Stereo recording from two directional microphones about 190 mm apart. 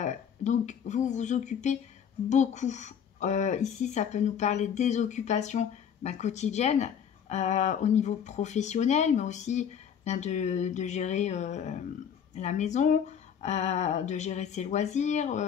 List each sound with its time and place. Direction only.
0.0 s speech: 40° left (ahead or behind)